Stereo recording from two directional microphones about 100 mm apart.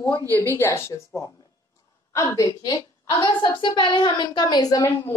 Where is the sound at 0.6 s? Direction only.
25° left (ahead or behind).